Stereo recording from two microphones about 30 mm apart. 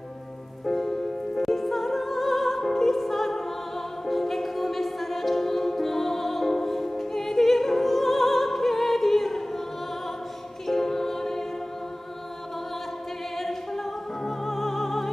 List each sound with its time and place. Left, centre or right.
0.7 s music: centre
10.7 s music: centre
14.2 s music: centre